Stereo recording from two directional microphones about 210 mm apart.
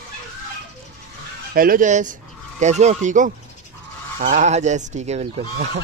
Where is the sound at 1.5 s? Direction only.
45° right (ahead or behind).